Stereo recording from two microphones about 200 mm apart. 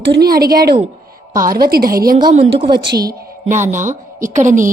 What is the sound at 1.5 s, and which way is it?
Speech, 50° right (ahead or behind).